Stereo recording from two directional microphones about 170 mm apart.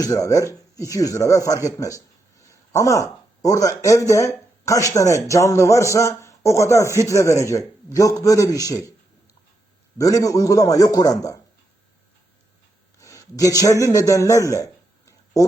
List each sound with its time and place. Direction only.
0.0 s speech: 20° left (ahead or behind)
10.0 s speech: 20° left (ahead or behind)
13.0 s a man's voice: 20° left (ahead or behind)